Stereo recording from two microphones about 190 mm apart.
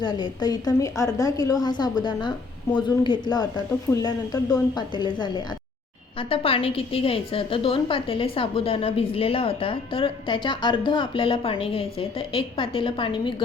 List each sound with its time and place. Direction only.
0.0 s a woman's voice: 25° left (ahead or behind)